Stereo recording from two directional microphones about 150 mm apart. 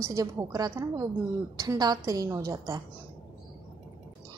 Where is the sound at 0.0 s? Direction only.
20° right (ahead or behind).